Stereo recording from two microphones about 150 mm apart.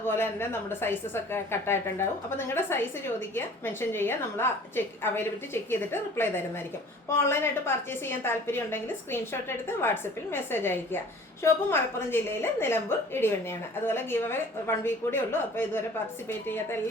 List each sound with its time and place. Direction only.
0.0 s a woman's voice: 15° left (ahead or behind)